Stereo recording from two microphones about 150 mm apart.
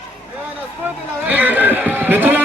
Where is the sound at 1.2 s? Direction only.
10° right (ahead or behind).